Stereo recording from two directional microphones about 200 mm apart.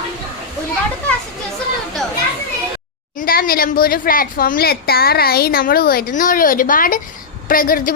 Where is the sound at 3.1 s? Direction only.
45° left (ahead or behind).